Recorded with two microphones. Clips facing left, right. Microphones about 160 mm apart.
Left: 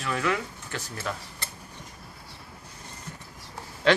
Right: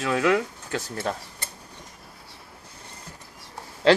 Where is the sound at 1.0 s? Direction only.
35° right (ahead or behind).